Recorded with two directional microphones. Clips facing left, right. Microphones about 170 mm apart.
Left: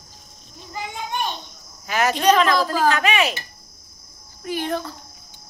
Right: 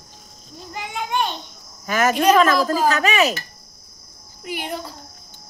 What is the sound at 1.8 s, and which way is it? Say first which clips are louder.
A woman's voice: right 1 dB; 50° right (ahead or behind).